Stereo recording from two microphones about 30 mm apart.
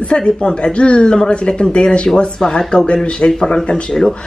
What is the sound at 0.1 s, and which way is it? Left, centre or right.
Speech, left.